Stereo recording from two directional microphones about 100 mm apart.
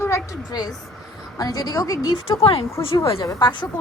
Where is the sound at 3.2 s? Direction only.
35° left (ahead or behind).